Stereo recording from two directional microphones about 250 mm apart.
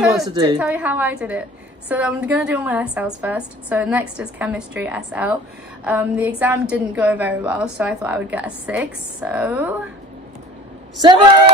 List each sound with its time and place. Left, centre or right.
0.0 s a woman's voice: centre
0.3 s a woman's voice: centre
0.6 s a woman's voice: centre